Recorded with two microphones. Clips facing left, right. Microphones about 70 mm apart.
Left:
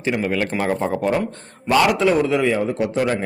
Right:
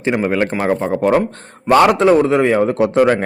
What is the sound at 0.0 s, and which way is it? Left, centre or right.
Speech, right.